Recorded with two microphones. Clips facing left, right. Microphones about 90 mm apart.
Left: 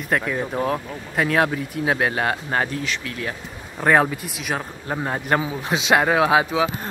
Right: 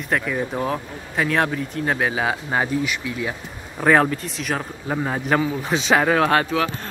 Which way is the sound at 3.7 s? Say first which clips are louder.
Right 1 dB; centre (ahead or behind).